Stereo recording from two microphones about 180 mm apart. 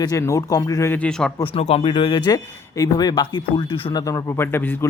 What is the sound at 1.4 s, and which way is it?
Speech, 35° left (ahead or behind).